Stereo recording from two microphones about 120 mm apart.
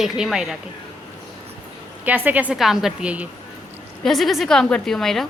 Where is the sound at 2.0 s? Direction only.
15° right (ahead or behind).